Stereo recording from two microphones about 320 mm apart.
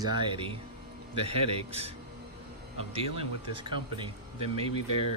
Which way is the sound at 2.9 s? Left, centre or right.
Centre.